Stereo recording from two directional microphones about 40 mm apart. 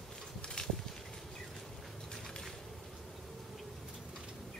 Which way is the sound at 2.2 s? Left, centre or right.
Centre.